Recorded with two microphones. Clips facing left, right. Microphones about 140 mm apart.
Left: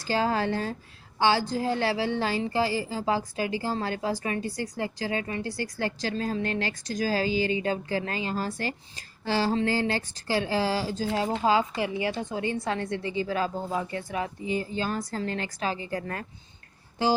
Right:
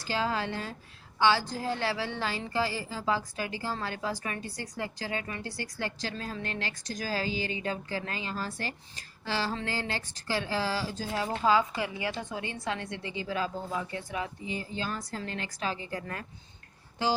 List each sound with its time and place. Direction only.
0.1 s a woman's voice: 40° left (ahead or behind)